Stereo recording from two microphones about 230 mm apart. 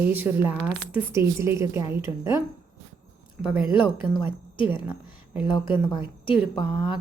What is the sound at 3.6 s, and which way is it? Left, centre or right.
A woman's voice, left.